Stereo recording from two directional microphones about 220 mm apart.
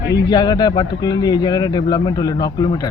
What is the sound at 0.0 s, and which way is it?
Speech, 20° left (ahead or behind).